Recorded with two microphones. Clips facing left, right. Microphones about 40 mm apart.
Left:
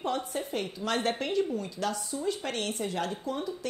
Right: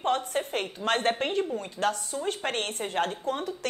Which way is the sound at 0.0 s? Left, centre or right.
Right.